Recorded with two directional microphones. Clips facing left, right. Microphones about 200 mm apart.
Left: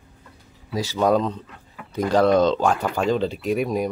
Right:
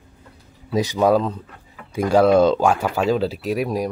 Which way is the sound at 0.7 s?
20° right (ahead or behind).